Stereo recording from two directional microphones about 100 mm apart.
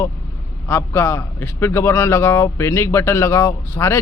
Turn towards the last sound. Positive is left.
turn(degrees=20)  # may be behind; listen again after turning